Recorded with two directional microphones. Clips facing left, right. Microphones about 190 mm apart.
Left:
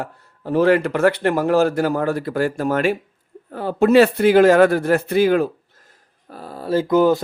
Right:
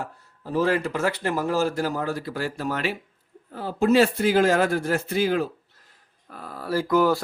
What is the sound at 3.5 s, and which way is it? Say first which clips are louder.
Speech: left 6 dB; 60° left (ahead or behind).